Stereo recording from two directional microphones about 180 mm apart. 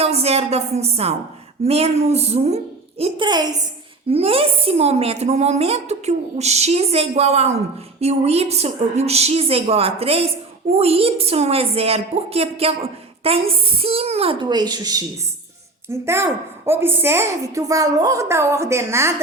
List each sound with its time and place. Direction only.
0.0 s a woman's voice: 35° right (ahead or behind)
3.0 s a woman's voice: 25° right (ahead or behind)